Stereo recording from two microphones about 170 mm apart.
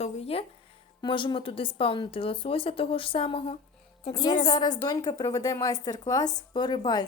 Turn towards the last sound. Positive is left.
turn(degrees=25)  # may be behind; listen again after turning